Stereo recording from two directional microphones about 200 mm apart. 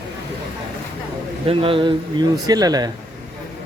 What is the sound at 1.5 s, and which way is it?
Speech, 25° right (ahead or behind).